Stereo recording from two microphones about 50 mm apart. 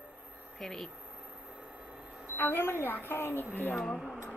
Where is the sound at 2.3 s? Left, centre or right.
Left.